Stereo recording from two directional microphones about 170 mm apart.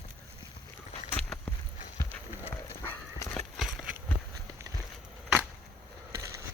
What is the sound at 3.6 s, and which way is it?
Horse, centre (ahead or behind).